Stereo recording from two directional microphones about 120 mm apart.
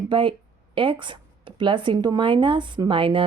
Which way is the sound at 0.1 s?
45° right (ahead or behind).